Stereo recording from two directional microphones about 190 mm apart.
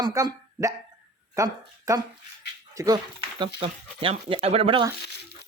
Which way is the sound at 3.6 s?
30° right (ahead or behind).